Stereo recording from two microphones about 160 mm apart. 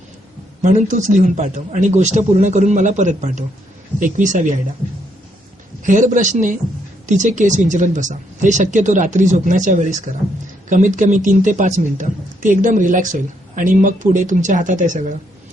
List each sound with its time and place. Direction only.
0.6 s speech: 50° right (ahead or behind)
5.8 s speech: 50° right (ahead or behind)